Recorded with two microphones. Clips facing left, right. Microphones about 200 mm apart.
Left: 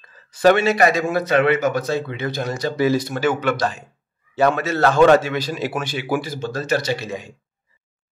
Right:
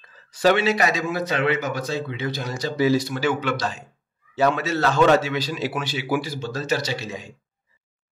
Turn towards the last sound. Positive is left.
turn(degrees=55)  # may be behind; listen again after turning